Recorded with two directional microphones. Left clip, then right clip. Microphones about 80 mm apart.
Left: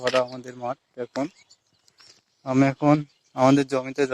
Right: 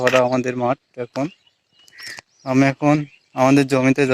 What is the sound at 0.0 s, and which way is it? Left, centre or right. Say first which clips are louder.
Speech: right 7 dB; left.